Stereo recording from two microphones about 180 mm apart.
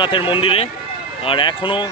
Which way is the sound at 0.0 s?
30° left (ahead or behind).